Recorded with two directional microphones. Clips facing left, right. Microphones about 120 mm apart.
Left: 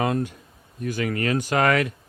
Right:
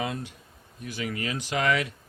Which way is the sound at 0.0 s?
50° left (ahead or behind).